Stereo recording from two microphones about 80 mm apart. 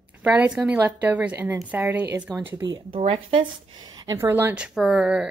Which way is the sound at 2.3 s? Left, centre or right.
Centre.